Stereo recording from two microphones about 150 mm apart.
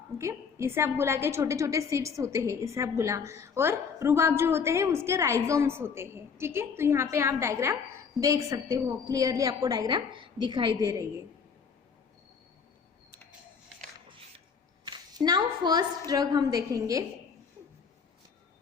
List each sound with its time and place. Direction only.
0.2 s a woman's voice: 20° right (ahead or behind)
14.1 s a sound: 40° right (ahead or behind)
14.8 s a woman's voice: 25° right (ahead or behind)